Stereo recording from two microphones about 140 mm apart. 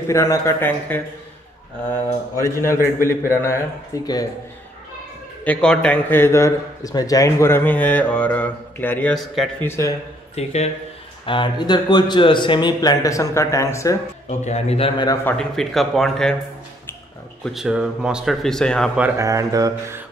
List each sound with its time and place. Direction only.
0.1 s a man's voice: 20° left (ahead or behind)
2.3 s a man's voice: 20° left (ahead or behind)
5.4 s a man's voice: 10° left (ahead or behind)
9.1 s speech: centre (ahead or behind)
9.6 s a man's voice: 20° left (ahead or behind)
10.3 s a man's voice: 50° left (ahead or behind)
11.2 s speech: 35° left (ahead or behind)
14.4 s a man's voice: 50° left (ahead or behind)
15.2 s speech: 5° left (ahead or behind)
17.5 s speech: 5° right (ahead or behind)
19.1 s a sound: 25° right (ahead or behind)